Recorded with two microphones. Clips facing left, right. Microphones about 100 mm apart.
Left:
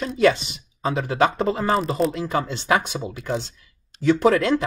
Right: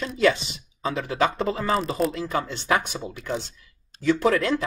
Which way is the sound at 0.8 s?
30° left (ahead or behind).